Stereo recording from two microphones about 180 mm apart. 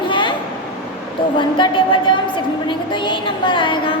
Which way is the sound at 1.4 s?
25° left (ahead or behind).